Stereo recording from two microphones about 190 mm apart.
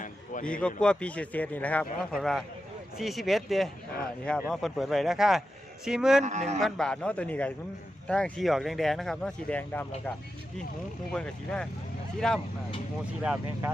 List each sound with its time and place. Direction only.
0.4 s a man's voice: 5° left (ahead or behind)
6.2 s a man's voice: 40° right (ahead or behind)
6.6 s a man's voice: centre (ahead or behind)
11.1 s a man's voice: 5° left (ahead or behind)